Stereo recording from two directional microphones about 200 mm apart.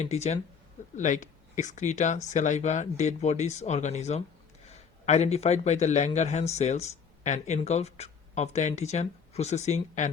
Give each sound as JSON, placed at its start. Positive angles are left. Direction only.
{"t": 0.0, "sound": "a man's voice", "side_deg": 35}